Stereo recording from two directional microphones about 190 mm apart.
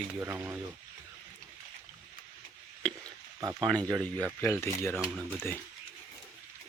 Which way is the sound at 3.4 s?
20° right (ahead or behind).